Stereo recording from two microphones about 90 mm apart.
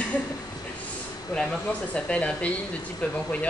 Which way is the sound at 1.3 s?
10° left (ahead or behind).